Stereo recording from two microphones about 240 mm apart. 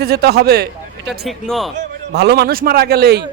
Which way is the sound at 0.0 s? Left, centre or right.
Right.